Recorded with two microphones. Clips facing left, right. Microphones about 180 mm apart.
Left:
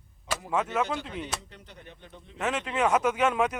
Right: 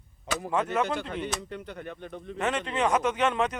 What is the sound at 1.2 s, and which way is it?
Speech, 60° right (ahead or behind).